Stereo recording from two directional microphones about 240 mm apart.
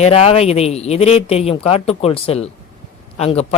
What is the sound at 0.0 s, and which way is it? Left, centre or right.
A man's voice, left.